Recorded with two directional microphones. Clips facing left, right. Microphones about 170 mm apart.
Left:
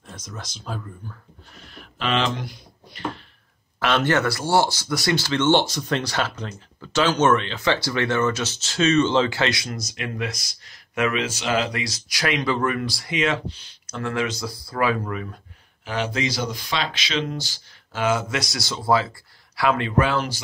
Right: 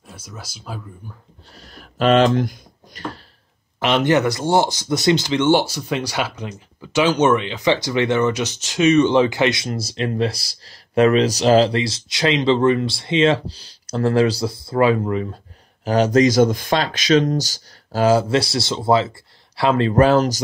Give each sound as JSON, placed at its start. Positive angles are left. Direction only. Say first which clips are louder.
{"t": 0.0, "sound": "speech", "louder": "even", "side_deg": -5}
{"t": 1.5, "sound": "a sound", "louder": "right 2 dB", "side_deg": -40}
{"t": 3.8, "sound": "speech", "louder": "right 4 dB", "side_deg": -15}
{"t": 15.8, "sound": "speech", "louder": "right 11 dB", "side_deg": -40}
{"t": 19.9, "sound": "speech", "louder": "right 7 dB", "side_deg": -40}